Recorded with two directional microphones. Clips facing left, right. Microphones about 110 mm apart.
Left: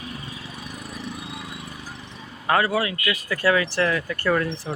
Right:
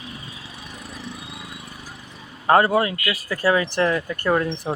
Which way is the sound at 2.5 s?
35° right (ahead or behind).